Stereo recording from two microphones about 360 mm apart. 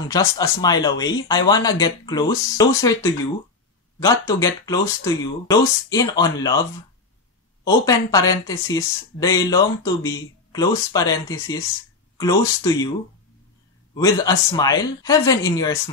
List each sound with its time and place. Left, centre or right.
0.1 s speech: centre
7.6 s speech: centre
13.9 s speech: centre